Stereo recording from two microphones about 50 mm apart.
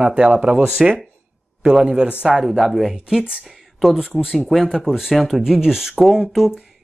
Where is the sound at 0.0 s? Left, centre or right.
Centre.